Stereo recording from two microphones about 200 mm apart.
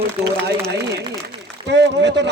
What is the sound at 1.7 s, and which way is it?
Speech, 60° right (ahead or behind).